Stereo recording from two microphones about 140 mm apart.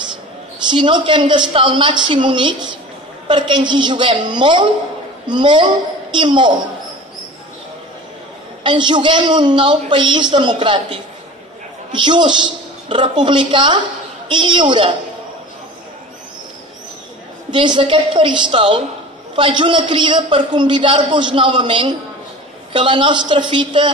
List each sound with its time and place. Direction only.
0.7 s a man's voice: 35° right (ahead or behind)
8.6 s a man's voice: 35° right (ahead or behind)
17.5 s a man's voice: 35° right (ahead or behind)